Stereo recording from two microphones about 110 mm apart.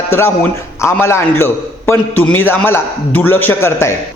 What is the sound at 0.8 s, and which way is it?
A man's voice, 25° left (ahead or behind).